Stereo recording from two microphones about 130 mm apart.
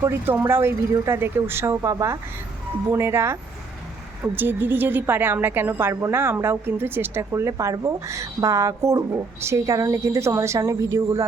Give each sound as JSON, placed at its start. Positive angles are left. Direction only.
{"t": 0.4, "sound": "a woman's voice", "side_deg": -20}